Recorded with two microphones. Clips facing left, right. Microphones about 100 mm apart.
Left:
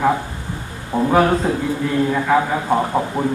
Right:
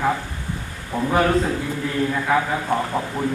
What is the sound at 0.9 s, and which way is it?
Speech, 20° left (ahead or behind).